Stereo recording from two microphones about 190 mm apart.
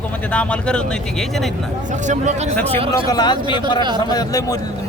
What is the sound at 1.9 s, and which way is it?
Speech, 40° right (ahead or behind).